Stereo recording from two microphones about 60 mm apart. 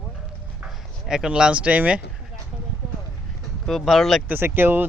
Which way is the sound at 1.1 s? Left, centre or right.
Centre.